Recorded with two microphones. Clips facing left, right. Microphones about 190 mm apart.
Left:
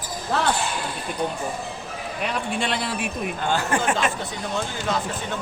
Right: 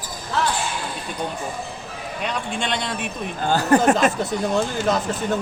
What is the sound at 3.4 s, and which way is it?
Speech, 40° right (ahead or behind).